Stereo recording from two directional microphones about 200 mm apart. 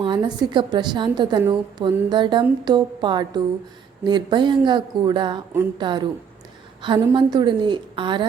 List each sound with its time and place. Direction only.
0.0 s a woman's voice: 25° right (ahead or behind)